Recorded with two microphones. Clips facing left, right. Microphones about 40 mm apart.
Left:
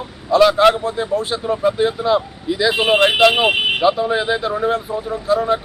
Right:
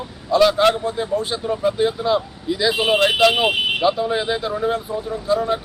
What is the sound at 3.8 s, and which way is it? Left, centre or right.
Speech, centre.